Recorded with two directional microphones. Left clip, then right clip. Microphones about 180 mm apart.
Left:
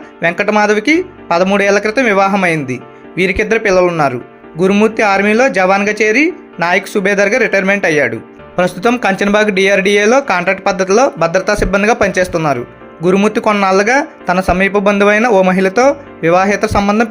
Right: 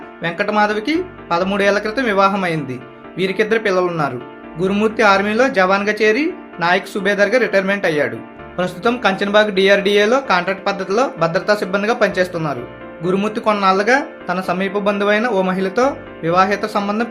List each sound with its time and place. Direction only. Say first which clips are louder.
0.2 s speech: left 5 dB; 40° left (ahead or behind)